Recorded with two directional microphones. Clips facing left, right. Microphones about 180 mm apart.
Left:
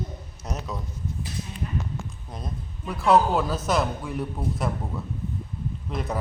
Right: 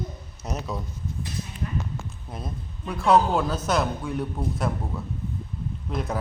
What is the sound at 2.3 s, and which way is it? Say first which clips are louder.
A man's voice: right 2 dB; 5° right (ahead or behind).